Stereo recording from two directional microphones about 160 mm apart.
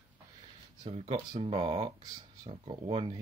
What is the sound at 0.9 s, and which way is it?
Speech, 40° right (ahead or behind).